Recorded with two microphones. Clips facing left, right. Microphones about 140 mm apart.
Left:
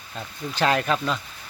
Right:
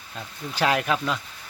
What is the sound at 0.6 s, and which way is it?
Speech, 10° right (ahead or behind).